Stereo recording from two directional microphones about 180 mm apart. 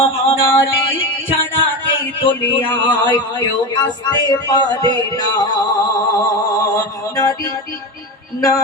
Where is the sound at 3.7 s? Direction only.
20° left (ahead or behind).